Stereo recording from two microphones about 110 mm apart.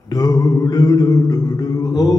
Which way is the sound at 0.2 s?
35° left (ahead or behind).